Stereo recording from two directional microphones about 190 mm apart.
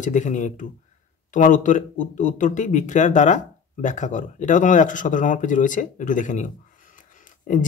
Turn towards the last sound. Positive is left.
turn(degrees=45)  # may be behind; listen again after turning